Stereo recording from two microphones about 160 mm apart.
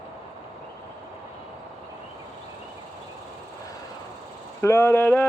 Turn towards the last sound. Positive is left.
turn(degrees=10)  # may be behind; listen again after turning